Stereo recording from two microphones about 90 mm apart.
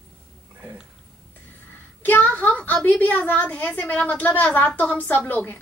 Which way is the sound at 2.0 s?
20° left (ahead or behind).